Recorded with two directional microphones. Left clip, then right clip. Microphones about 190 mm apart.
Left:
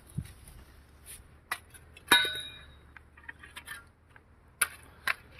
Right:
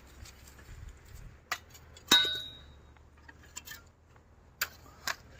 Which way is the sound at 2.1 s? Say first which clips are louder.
Left 1 dB; 15° right (ahead or behind).